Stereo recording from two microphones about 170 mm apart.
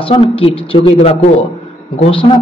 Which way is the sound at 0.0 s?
35° left (ahead or behind).